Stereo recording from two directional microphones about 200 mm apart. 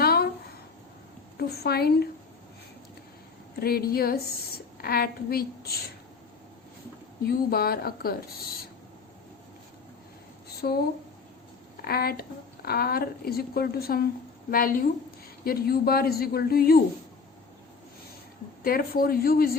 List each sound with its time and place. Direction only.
0.0 s a sound: 50° left (ahead or behind)
1.4 s a woman's voice: 50° left (ahead or behind)
3.5 s a woman's voice: 50° left (ahead or behind)
7.5 s a woman's voice: 50° left (ahead or behind)
10.6 s a woman's voice: 50° left (ahead or behind)
11.9 s a woman's voice: 50° left (ahead or behind)
18.6 s a woman's voice: 45° left (ahead or behind)